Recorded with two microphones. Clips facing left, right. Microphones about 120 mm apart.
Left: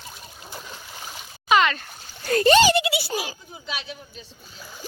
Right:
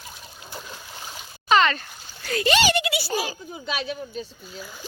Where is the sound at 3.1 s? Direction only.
10° left (ahead or behind).